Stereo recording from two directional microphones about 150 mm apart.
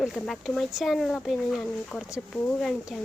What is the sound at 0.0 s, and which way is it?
A woman's voice, centre (ahead or behind).